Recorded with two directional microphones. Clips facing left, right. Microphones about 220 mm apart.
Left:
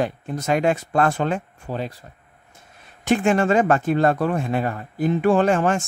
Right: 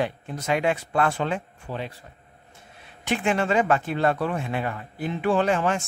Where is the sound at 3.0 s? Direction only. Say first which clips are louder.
Left 6 dB; 45° left (ahead or behind).